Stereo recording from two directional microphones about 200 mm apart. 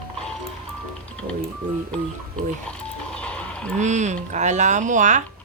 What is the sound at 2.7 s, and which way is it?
Music, 5° left (ahead or behind).